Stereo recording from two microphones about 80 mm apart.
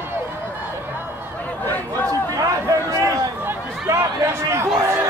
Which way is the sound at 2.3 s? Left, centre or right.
Right.